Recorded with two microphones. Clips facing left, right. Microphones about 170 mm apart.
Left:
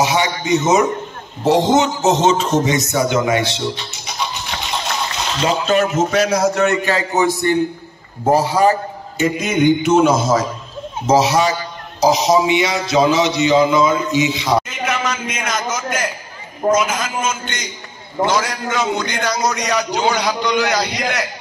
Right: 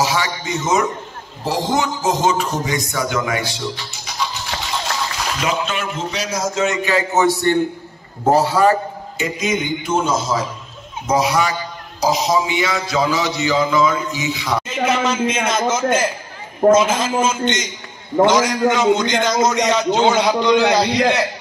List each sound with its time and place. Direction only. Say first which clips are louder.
0.0 s a man's voice: left 3 dB; 20° left (ahead or behind); by 6.8 s 65° left (ahead or behind)
9.2 s a man's voice: left 6 dB; 55° left (ahead or behind)
11.1 s a man's voice: left 3 dB; 25° left (ahead or behind)
14.7 s a man's voice: right 3 dB; 30° right (ahead or behind)